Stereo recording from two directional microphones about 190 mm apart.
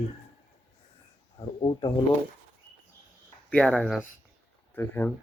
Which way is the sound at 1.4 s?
25° left (ahead or behind).